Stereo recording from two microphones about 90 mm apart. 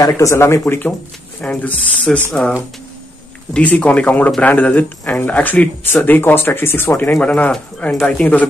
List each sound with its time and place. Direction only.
0.0 s speech: 35° left (ahead or behind); by 8.5 s 15° left (ahead or behind)